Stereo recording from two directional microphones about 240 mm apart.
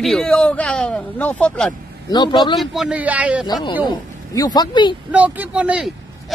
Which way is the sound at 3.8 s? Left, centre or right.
Centre.